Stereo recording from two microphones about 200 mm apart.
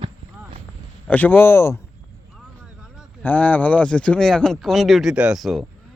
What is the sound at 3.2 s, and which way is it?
A man's voice, 5° left (ahead or behind).